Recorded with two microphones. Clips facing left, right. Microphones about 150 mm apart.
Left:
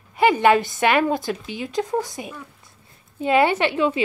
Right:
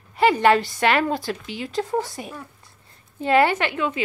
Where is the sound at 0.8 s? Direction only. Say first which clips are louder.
Left 2 dB; 15° left (ahead or behind).